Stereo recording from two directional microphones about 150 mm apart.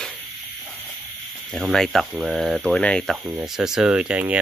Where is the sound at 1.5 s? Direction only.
Centre (ahead or behind).